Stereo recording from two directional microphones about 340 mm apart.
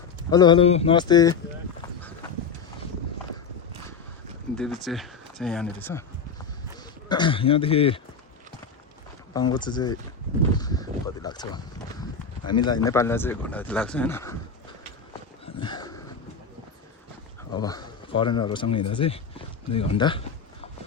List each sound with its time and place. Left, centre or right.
0.3 s speech: centre
4.5 s speech: centre
7.1 s speech: centre
9.3 s speech: centre
10.6 s a sound: centre
12.4 s clip-clop: left
12.6 s speech: centre
15.6 s a sound: centre
17.5 s speech: centre